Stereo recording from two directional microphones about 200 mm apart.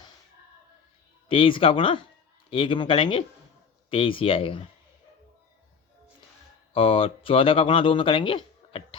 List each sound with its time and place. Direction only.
1.3 s speech: 25° left (ahead or behind)
6.7 s speech: 25° left (ahead or behind)